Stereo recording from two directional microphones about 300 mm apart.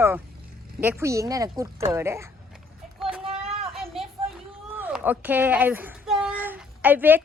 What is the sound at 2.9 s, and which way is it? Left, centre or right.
Child singing, centre.